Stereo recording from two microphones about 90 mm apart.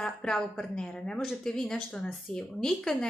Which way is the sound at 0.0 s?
5° left (ahead or behind).